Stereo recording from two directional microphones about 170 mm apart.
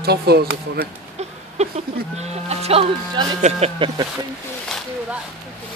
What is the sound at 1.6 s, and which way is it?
Sheep, 40° right (ahead or behind).